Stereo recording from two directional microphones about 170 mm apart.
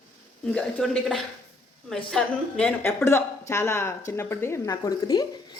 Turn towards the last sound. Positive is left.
turn(degrees=25)  # may be behind; listen again after turning